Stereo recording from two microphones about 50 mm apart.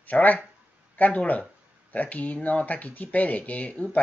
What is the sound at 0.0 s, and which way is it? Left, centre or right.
Speech, left.